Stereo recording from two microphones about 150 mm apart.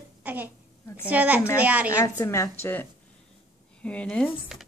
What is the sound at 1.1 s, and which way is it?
Speech, 10° right (ahead or behind).